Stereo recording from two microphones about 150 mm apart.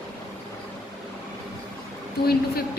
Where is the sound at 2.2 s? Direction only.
90° left.